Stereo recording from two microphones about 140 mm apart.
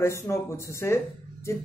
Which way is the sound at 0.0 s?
20° left (ahead or behind).